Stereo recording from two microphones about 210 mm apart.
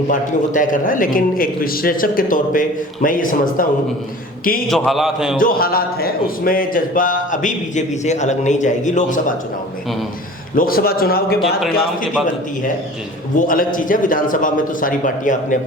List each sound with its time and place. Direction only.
0.1 s speech: 40° left (ahead or behind)
4.7 s a man's voice: centre (ahead or behind)
5.4 s speech: 45° left (ahead or behind)
10.5 s a man's voice: 40° left (ahead or behind)
13.3 s speech: 40° left (ahead or behind)